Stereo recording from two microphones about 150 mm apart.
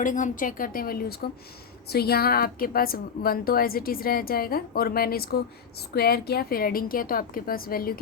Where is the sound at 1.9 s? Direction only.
90° left.